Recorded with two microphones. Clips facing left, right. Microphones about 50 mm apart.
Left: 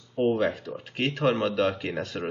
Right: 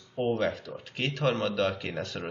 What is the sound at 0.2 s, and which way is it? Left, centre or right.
Speech, centre.